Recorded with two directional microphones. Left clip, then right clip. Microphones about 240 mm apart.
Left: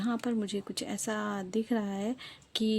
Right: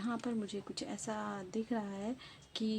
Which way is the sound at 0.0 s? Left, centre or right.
Left.